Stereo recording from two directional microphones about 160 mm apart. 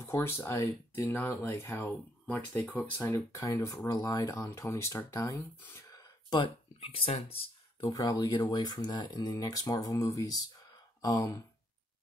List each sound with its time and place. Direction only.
0.0 s speech: 20° left (ahead or behind)
3.0 s speech: 20° left (ahead or behind); by 7.9 s 35° left (ahead or behind)
7.9 s speech: 25° left (ahead or behind)